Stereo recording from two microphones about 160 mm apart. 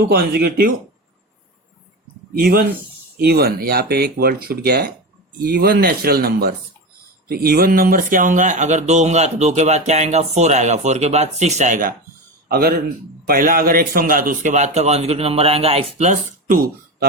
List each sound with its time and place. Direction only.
0.1 s speech: 70° right (ahead or behind)
2.3 s speech: 70° right (ahead or behind)
12.5 s speech: 70° right (ahead or behind)